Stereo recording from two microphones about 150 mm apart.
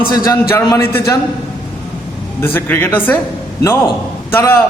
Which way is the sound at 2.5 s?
15° left (ahead or behind).